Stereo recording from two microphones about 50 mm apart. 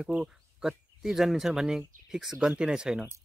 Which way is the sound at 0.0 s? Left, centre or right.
Centre.